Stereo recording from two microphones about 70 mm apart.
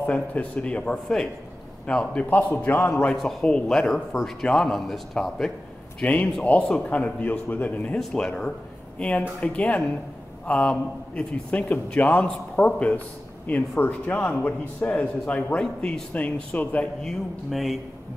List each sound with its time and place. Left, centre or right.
0.0 s a man's voice: left
2.2 s speech: left
3.2 s speech: centre
6.0 s speech: left
8.0 s a man's voice: centre
17.0 s speech: centre